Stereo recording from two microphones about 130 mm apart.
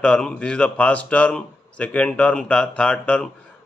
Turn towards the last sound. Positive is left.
turn(degrees=10)  # may be behind; listen again after turning